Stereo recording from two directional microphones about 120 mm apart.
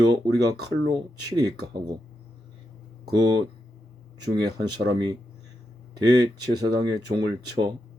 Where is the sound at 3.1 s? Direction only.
35° right (ahead or behind).